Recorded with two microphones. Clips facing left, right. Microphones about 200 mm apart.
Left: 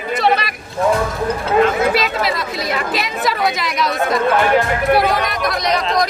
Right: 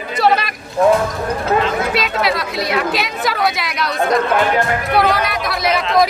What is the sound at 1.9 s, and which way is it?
Speech, centre (ahead or behind).